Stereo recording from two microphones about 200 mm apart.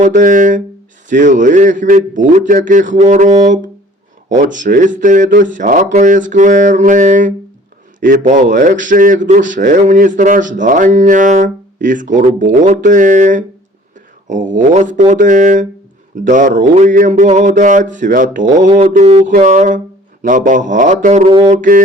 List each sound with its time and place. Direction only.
0.0 s speech: 40° right (ahead or behind)